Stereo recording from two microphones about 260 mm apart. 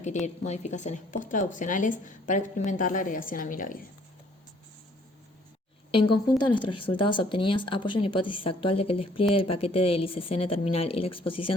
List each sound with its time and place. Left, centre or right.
0.0 s speech: left
6.4 s speech: centre